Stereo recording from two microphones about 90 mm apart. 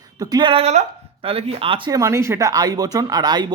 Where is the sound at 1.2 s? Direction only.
90° right.